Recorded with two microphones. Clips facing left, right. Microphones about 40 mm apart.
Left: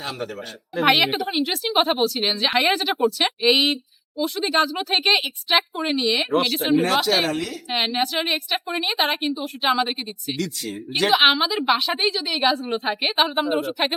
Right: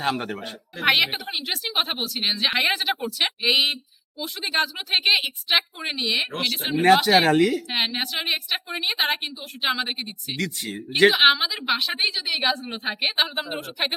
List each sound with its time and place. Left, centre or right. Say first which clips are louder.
0.0 s speech: right 4 dB; right
0.8 s speech: left 3 dB; centre
6.9 s speech: right 3 dB; centre
7.3 s speech: right 7 dB; right
7.7 s speech: left 3 dB; centre
10.3 s speech: right 1 dB; right
11.1 s speech: left 2 dB; centre